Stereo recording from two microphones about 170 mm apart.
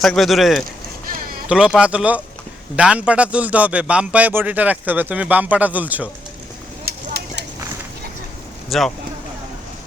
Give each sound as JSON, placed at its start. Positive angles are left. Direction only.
{"t": 0.0, "sound": "a man's voice", "side_deg": 0}
{"t": 6.8, "sound": "a sound", "side_deg": -70}
{"t": 8.7, "sound": "speech", "side_deg": 0}